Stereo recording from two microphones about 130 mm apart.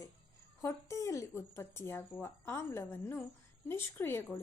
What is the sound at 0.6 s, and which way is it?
A woman's voice, 20° left (ahead or behind).